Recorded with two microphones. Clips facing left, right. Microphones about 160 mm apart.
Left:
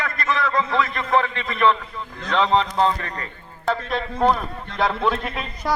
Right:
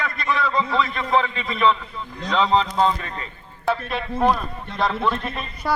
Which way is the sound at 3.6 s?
5° right (ahead or behind).